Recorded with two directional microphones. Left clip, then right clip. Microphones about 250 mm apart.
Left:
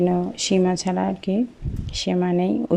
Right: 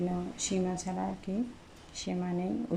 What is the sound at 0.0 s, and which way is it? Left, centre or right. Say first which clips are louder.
Speech: left 13 dB; left.